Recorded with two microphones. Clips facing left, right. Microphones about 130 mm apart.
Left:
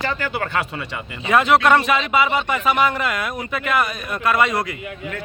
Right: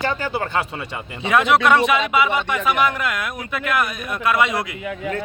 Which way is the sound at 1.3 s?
Centre (ahead or behind).